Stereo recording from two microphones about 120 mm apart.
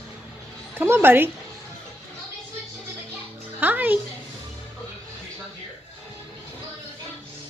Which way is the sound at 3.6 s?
15° right (ahead or behind).